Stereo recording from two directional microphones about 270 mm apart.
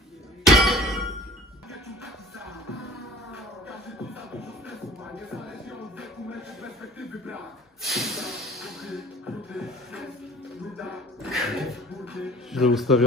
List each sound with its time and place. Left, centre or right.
0.5 s clang: centre
5.3 s music: centre
7.8 s snort: centre
9.5 s music: centre